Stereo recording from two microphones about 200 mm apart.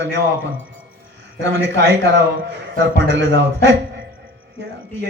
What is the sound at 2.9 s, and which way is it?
Speech, 60° right (ahead or behind).